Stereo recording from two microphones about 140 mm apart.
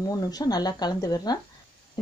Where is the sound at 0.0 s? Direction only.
25° left (ahead or behind).